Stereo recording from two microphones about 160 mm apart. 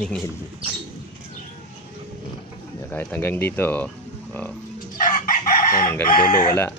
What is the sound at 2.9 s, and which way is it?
Speech, 10° left (ahead or behind).